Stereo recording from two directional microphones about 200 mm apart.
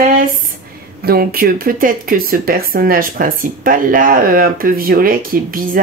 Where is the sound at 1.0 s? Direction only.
50° right (ahead or behind).